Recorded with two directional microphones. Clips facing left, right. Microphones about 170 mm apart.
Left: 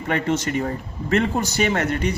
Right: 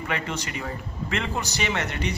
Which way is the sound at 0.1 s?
45° left (ahead or behind).